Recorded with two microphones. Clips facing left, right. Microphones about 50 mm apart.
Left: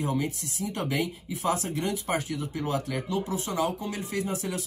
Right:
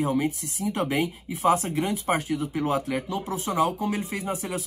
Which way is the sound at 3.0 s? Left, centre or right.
Centre.